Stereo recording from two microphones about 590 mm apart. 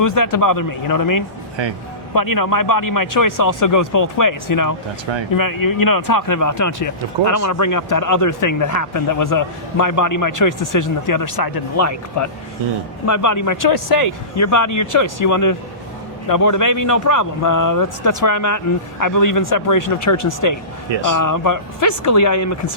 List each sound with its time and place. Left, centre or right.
0.0 s speech: left